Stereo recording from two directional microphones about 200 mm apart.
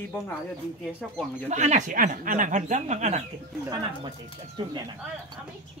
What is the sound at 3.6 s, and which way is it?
Speech, 20° right (ahead or behind).